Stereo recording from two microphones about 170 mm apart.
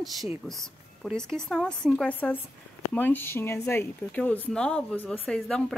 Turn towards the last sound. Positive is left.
turn(degrees=5)  # may be behind; listen again after turning